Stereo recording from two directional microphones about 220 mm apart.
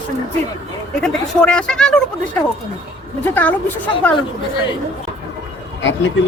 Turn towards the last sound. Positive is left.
turn(degrees=60)  # may be behind; listen again after turning